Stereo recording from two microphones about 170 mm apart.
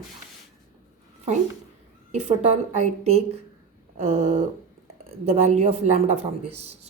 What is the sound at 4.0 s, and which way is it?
A woman's voice, 35° right (ahead or behind).